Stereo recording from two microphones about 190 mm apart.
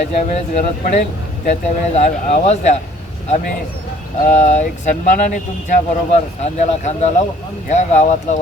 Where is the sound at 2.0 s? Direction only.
40° left (ahead or behind).